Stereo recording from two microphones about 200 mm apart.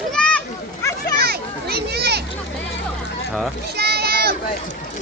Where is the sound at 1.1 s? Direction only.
50° right (ahead or behind).